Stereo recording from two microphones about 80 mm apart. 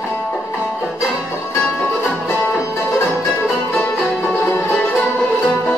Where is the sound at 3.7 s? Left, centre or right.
Left.